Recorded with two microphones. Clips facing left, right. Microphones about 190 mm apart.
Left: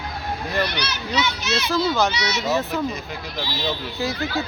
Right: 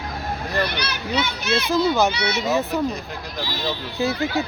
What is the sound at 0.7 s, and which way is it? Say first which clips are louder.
A child's voice: right 1 dB; 55° right (ahead or behind).